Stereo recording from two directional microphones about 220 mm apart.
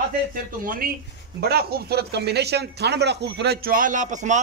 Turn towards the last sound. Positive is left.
turn(degrees=-35)  # may be behind; listen again after turning